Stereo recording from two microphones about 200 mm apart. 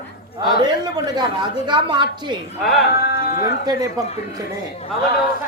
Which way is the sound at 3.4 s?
20° right (ahead or behind).